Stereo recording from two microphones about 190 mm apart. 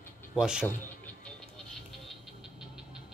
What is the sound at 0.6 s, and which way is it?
Music, 10° left (ahead or behind).